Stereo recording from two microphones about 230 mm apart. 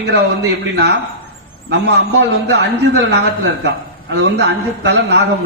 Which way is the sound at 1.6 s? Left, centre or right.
Right.